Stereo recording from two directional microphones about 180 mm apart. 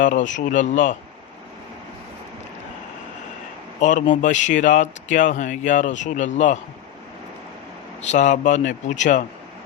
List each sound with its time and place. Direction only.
0.0 s speech: 45° left (ahead or behind)
3.8 s speech: 45° left (ahead or behind)
8.0 s speech: 40° left (ahead or behind)